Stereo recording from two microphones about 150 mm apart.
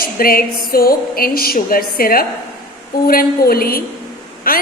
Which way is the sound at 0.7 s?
80° left.